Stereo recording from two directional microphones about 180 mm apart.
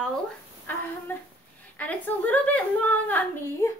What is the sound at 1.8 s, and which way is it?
A woman's voice, 10° left (ahead or behind).